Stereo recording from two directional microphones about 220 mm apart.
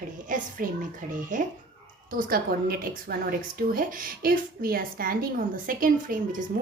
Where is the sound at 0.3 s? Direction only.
35° right (ahead or behind).